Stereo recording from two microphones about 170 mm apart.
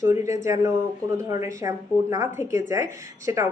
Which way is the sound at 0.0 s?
15° right (ahead or behind).